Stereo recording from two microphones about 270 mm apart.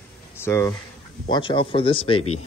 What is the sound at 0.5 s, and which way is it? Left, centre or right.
Speech, centre.